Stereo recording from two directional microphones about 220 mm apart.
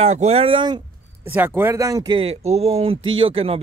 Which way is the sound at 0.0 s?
30° right (ahead or behind).